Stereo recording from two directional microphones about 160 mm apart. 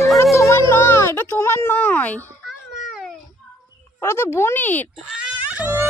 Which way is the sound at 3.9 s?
15° left (ahead or behind).